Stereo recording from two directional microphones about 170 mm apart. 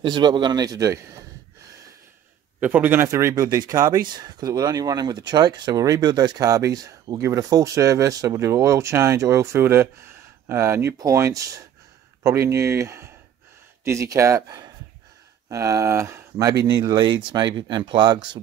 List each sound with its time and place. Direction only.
0.0 s speech: 25° right (ahead or behind)
2.6 s speech: 10° right (ahead or behind); by 18.4 s 25° right (ahead or behind)